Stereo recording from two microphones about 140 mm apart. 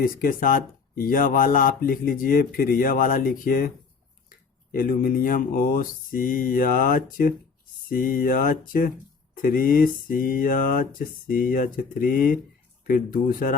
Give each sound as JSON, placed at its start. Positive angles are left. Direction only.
{"t": 0.0, "sound": "speech", "side_deg": 90}